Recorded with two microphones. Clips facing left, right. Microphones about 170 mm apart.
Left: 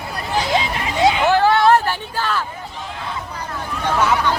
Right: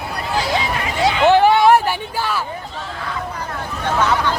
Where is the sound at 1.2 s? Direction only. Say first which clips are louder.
Right 6 dB; 15° right (ahead or behind).